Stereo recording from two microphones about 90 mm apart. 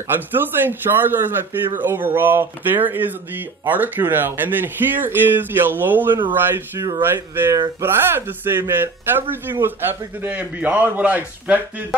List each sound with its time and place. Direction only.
0.1 s speech: 20° right (ahead or behind)